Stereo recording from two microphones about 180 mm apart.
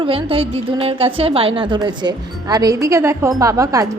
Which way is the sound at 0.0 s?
30° right (ahead or behind).